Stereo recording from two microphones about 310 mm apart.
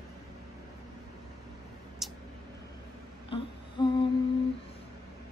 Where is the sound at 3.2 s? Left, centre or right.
Centre.